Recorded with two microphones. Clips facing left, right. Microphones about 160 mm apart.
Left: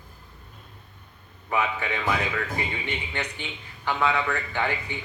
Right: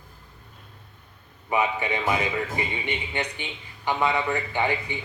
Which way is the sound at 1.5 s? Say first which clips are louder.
Right 2 dB; 15° right (ahead or behind).